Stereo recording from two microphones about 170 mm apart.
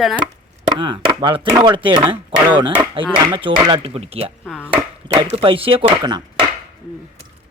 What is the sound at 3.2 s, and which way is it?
Speech, 25° right (ahead or behind).